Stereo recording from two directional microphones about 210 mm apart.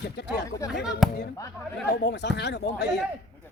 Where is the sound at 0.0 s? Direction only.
50° left (ahead or behind).